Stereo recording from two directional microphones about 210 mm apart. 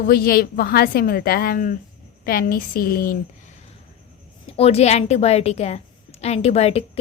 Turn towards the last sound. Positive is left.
turn(degrees=30)  # may be behind; listen again after turning